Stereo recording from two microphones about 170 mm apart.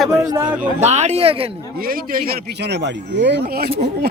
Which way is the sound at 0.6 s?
40° right (ahead or behind).